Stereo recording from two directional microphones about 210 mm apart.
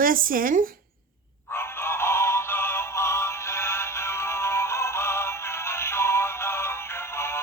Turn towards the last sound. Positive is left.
turn(degrees=10)  # may be behind; listen again after turning